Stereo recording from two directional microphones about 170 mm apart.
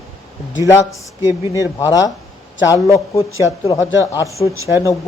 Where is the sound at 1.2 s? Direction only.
15° right (ahead or behind).